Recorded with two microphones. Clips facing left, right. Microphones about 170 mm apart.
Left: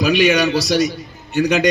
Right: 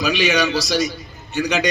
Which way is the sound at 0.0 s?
50° left (ahead or behind).